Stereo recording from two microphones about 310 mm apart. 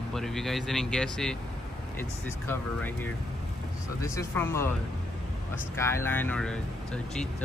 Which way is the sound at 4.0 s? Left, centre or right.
Centre.